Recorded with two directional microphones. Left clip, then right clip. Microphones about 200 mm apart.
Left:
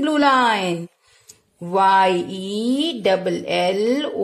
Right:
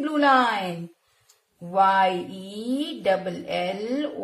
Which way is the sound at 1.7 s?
55° left (ahead or behind).